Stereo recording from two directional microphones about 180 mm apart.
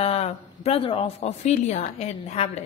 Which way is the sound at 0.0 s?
35° left (ahead or behind).